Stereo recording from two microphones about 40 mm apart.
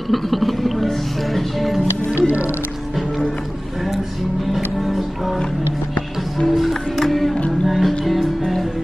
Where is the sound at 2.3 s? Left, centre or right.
Right.